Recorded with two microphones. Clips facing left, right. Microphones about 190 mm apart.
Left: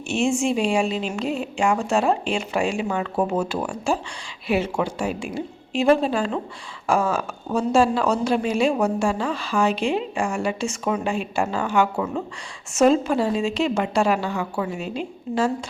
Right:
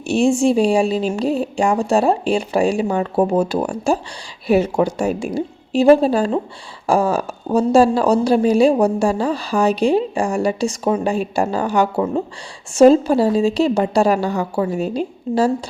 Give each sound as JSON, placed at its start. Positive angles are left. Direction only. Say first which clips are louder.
{"t": 0.1, "sound": "a woman's voice", "louder": "right 7 dB", "side_deg": -35}